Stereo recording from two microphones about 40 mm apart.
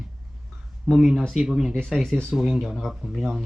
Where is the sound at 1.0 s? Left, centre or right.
Centre.